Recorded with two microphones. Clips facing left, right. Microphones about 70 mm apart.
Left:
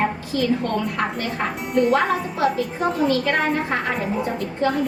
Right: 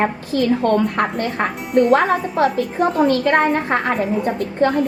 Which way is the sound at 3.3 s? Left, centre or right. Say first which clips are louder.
Right 5 dB; right.